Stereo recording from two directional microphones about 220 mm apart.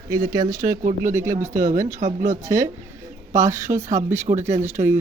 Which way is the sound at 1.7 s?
35° right (ahead or behind).